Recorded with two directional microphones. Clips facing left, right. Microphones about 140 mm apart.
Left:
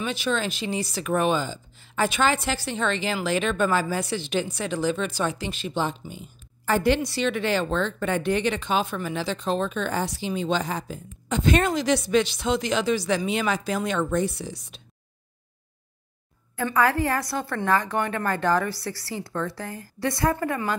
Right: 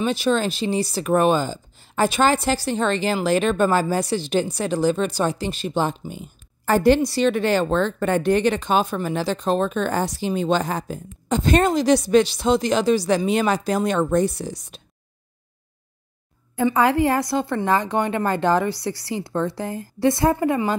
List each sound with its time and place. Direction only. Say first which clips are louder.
0.0 s speech: right 6 dB; 35° right (ahead or behind)
16.5 s a woman's voice: right 4 dB; 25° right (ahead or behind)